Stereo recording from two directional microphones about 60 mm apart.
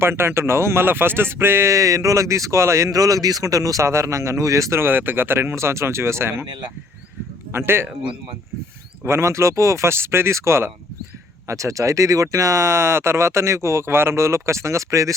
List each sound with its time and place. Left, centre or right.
0.0 s speech: right
1.7 s speech: right
3.8 s speech: right
4.8 s speech: right
7.5 s speech: right
9.0 s speech: right